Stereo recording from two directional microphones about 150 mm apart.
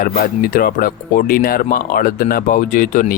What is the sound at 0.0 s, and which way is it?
Speech, 75° left (ahead or behind).